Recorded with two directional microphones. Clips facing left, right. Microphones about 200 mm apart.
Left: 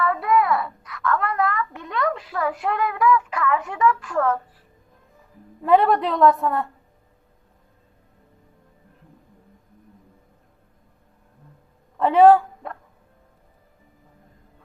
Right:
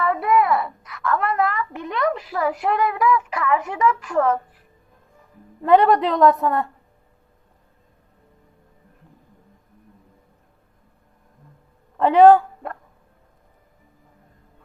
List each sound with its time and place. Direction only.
0.0 s a sound: 20° right (ahead or behind)
2.5 s child singing: 15° right (ahead or behind)
3.7 s a child's voice: 20° right (ahead or behind)
5.6 s a woman's voice: centre (ahead or behind)
11.9 s speech: 5° left (ahead or behind)